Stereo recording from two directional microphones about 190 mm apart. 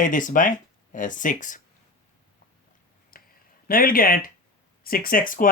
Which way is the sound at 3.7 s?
50° left (ahead or behind).